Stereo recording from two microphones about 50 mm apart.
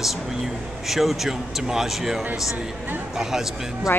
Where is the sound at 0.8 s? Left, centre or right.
Centre.